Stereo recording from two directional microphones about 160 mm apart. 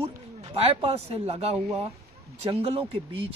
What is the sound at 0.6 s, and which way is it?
Speech, 40° right (ahead or behind).